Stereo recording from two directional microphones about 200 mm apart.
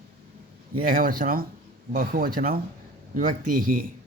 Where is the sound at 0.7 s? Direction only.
45° right (ahead or behind).